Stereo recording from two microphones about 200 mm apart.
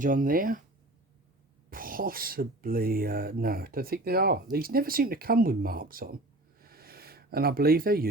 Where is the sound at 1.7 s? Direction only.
45° right (ahead or behind).